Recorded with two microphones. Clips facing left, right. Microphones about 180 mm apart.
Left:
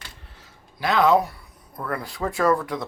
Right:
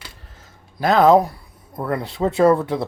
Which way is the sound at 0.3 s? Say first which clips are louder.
Right 11 dB; 45° right (ahead or behind).